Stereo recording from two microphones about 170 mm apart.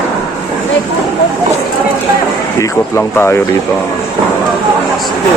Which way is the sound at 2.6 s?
15° left (ahead or behind).